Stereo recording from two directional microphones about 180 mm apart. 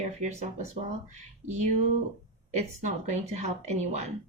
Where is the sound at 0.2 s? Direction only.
40° right (ahead or behind).